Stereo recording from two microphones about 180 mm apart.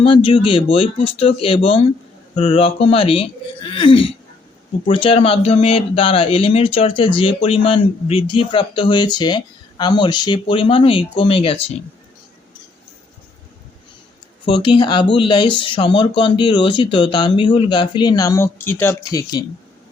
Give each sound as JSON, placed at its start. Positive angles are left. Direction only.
{"t": 0.0, "sound": "speech", "side_deg": 30}
{"t": 14.4, "sound": "speech", "side_deg": 25}